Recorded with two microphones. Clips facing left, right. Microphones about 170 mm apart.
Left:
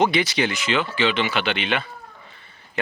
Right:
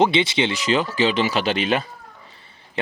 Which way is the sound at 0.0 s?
25° right (ahead or behind).